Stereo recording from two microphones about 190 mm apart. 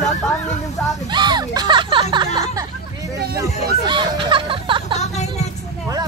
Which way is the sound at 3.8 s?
25° right (ahead or behind).